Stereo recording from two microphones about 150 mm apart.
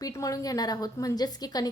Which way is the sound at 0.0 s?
25° left (ahead or behind).